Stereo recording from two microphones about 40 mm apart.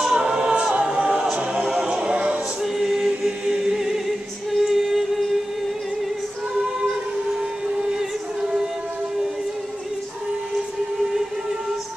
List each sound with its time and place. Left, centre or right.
0.1 s a capella: centre
1.3 s music: right
2.6 s choir: centre
3.1 s a capella: centre
4.6 s a sound: centre